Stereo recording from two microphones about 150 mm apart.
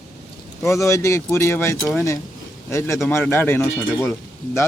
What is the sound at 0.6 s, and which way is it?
Speech, 20° left (ahead or behind).